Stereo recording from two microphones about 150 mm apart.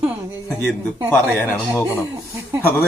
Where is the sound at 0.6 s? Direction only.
10° left (ahead or behind).